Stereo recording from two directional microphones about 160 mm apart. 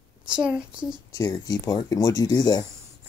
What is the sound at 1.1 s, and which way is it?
Speech, 20° left (ahead or behind).